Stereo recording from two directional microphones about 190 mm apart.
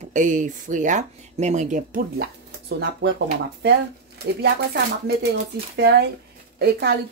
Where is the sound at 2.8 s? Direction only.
65° right (ahead or behind).